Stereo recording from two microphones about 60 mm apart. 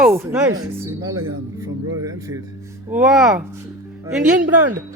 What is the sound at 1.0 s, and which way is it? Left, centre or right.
Speech, right.